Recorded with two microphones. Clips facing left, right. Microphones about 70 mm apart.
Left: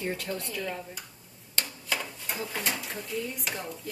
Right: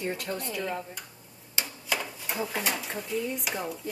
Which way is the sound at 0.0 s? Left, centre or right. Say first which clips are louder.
Right 1 dB; centre.